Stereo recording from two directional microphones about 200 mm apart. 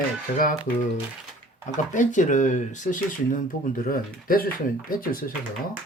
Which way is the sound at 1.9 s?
40° left (ahead or behind).